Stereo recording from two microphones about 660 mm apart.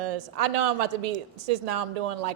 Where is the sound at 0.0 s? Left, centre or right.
Right.